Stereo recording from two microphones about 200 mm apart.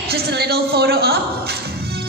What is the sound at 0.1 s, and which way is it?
A woman's voice, 55° right (ahead or behind).